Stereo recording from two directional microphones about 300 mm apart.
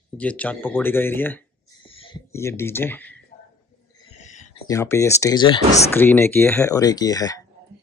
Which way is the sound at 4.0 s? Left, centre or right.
Centre.